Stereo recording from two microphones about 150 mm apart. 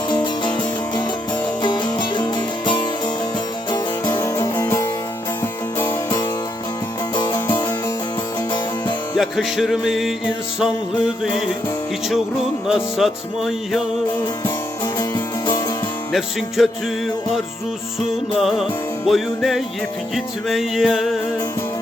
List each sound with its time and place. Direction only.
0.4 s music: 30° left (ahead or behind); by 6.1 s 15° left (ahead or behind)
7.2 s music: 30° left (ahead or behind)
9.1 s music: centre (ahead or behind)
12.6 s music: 5° right (ahead or behind)
14.9 s music: 25° left (ahead or behind)
16.6 s music: centre (ahead or behind)
18.4 s music: centre (ahead or behind)